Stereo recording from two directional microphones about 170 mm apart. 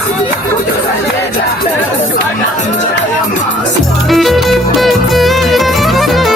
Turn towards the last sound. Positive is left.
turn(degrees=0)  # may be behind; listen again after turning